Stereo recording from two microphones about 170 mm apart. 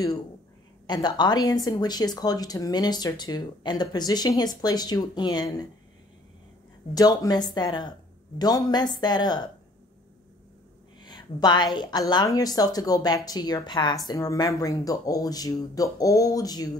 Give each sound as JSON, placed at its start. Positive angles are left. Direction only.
{"t": 0.8, "sound": "speech", "side_deg": 25}
{"t": 6.9, "sound": "speech", "side_deg": 20}
{"t": 11.0, "sound": "speech", "side_deg": 25}